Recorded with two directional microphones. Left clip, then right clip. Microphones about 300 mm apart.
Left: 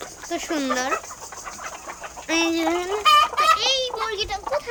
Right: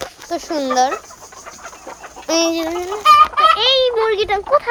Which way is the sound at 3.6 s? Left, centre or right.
Centre.